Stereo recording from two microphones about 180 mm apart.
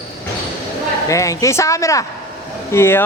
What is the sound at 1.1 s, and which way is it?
Speech, 20° left (ahead or behind).